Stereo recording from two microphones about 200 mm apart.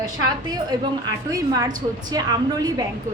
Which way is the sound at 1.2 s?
15° right (ahead or behind).